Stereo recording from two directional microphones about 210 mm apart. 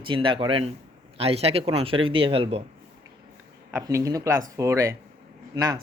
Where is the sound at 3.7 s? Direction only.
15° right (ahead or behind).